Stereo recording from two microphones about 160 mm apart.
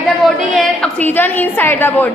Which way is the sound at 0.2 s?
Centre (ahead or behind).